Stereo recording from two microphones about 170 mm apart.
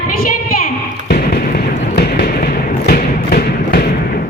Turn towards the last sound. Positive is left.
turn(degrees=60)  # may be behind; listen again after turning